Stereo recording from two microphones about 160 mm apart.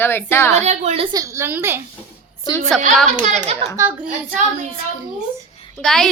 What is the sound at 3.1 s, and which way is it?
Speech, 50° right (ahead or behind).